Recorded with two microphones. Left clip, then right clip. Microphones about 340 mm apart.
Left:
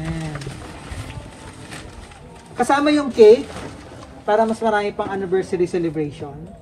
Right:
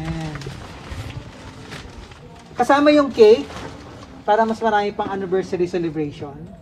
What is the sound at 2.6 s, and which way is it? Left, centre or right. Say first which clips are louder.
Speech: right 3 dB; centre.